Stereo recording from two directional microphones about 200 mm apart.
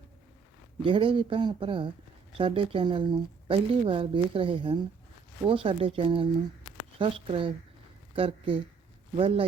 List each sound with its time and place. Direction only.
0.8 s speech: 25° right (ahead or behind)